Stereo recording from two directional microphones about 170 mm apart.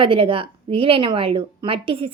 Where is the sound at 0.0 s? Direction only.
30° right (ahead or behind).